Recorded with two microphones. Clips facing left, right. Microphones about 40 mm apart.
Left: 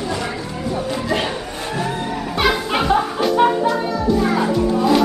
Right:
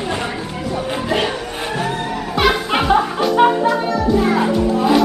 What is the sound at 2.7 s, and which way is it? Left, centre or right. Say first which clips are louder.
Music: right 2 dB; centre.